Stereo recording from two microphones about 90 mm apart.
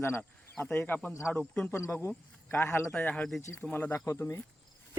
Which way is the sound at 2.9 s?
15° left (ahead or behind).